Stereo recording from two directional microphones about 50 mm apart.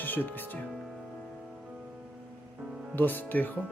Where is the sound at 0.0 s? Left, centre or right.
Left.